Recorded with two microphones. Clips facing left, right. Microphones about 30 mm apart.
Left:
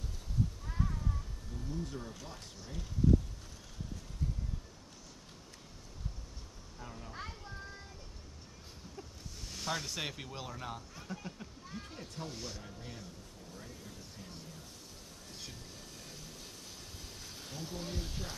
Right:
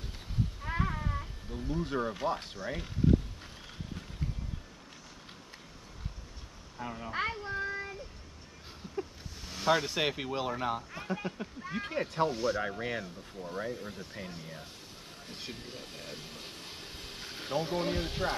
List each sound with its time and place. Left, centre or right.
0.6 s speech: right
6.8 s speech: right
7.1 s child singing: right
9.4 s speech: right
11.7 s speech: right
12.3 s speech: right
12.5 s speech: right